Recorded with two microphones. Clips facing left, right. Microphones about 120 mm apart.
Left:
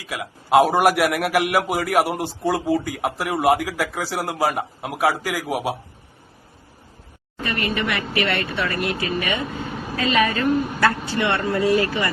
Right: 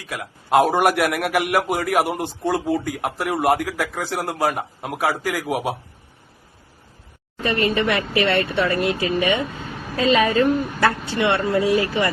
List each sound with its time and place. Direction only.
0.0 s a man's voice: centre (ahead or behind)
7.4 s speech: 30° right (ahead or behind)